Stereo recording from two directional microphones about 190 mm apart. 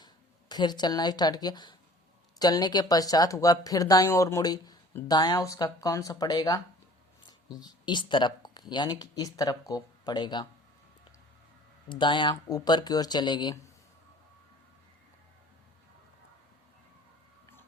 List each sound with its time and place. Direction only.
0.0 s speech: 20° left (ahead or behind)
11.9 s speech: 25° left (ahead or behind)